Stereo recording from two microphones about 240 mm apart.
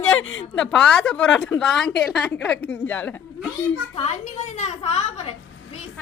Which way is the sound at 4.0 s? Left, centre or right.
Left.